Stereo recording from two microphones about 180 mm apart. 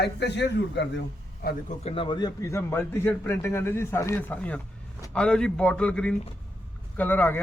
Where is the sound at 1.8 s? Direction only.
30° left (ahead or behind).